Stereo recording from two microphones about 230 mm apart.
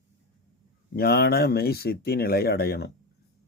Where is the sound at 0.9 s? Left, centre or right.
Left.